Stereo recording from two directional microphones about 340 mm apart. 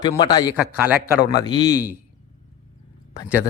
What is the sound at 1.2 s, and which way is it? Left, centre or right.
Speech, centre.